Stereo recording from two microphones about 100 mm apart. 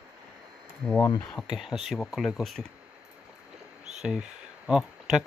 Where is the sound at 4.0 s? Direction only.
5° right (ahead or behind).